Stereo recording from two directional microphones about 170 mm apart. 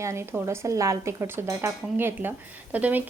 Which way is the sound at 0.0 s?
15° right (ahead or behind).